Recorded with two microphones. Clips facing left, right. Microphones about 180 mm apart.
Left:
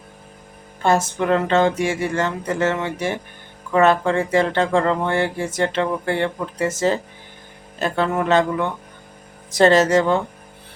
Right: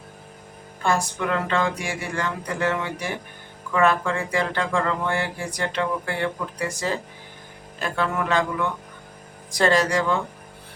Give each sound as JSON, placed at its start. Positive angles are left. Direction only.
{"t": 0.8, "sound": "speech", "side_deg": 25}